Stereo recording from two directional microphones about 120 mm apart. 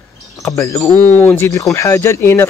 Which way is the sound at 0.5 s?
25° left (ahead or behind).